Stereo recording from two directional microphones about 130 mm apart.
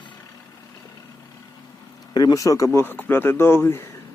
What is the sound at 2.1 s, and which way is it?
Speech, 30° left (ahead or behind).